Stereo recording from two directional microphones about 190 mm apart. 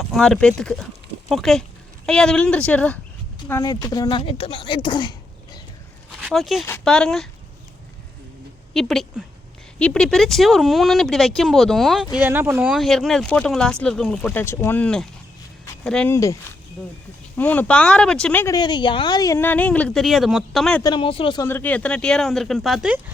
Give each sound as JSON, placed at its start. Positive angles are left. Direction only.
{"t": 0.0, "sound": "speech", "side_deg": 0}
{"t": 3.5, "sound": "speech", "side_deg": 20}
{"t": 6.2, "sound": "speech", "side_deg": 0}
{"t": 8.7, "sound": "speech", "side_deg": 0}
{"t": 18.5, "sound": "speech", "side_deg": 25}
{"t": 20.8, "sound": "speech", "side_deg": 25}
{"t": 21.4, "sound": "speech", "side_deg": 10}